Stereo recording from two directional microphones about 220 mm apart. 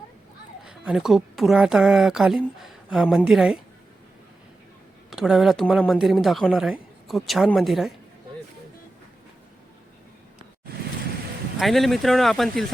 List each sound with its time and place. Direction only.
0.6 s a woman's voice: 5° right (ahead or behind)
5.1 s speech: centre (ahead or behind)
11.6 s speech: centre (ahead or behind)